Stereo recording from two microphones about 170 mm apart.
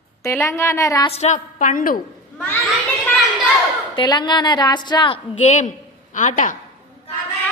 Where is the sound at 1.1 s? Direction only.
45° left (ahead or behind).